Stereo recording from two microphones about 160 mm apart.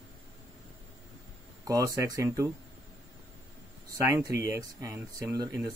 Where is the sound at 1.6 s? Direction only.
20° right (ahead or behind).